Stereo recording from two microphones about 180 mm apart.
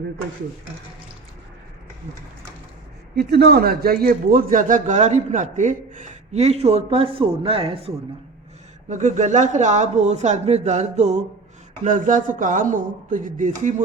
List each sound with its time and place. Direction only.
3.2 s speech: 65° right (ahead or behind); by 13.5 s 45° right (ahead or behind)